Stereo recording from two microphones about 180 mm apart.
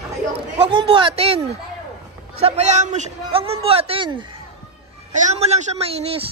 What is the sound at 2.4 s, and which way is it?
A man's voice, 40° right (ahead or behind).